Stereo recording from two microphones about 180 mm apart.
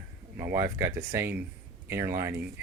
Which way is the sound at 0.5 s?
15° right (ahead or behind).